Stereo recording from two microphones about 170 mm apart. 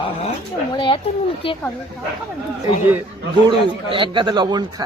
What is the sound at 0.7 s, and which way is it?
Speech, 30° left (ahead or behind).